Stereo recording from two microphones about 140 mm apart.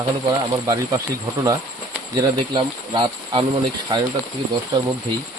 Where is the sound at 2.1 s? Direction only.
30° right (ahead or behind).